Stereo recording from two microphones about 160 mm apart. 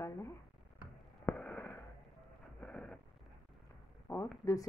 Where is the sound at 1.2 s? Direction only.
10° left (ahead or behind).